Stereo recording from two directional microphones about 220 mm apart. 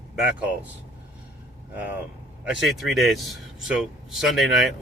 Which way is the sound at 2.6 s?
Centre (ahead or behind).